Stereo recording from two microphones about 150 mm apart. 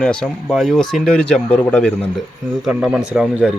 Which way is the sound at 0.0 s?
5° left (ahead or behind).